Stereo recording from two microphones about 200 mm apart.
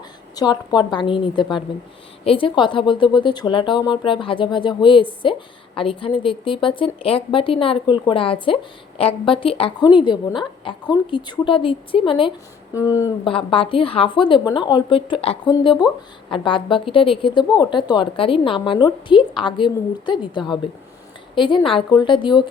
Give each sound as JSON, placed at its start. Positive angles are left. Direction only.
{"t": 0.3, "sound": "a woman's voice", "side_deg": 20}
{"t": 12.7, "sound": "speech", "side_deg": 15}
{"t": 13.3, "sound": "a woman's voice", "side_deg": 25}